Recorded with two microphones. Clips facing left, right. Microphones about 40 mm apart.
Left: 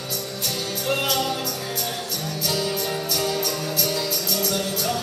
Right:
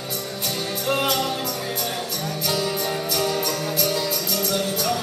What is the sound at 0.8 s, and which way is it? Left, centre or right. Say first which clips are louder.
Music: right 1 dB; centre.